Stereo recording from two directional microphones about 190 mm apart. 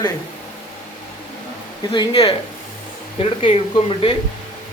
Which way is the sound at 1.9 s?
25° left (ahead or behind).